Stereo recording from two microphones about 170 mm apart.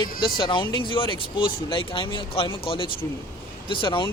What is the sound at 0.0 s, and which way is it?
Speech, 25° left (ahead or behind).